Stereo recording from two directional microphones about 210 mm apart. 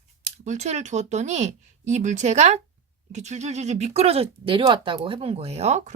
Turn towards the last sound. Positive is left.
turn(degrees=-30)  # may be behind; listen again after turning